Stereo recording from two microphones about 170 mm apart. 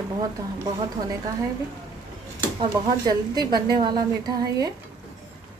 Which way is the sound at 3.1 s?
25° right (ahead or behind).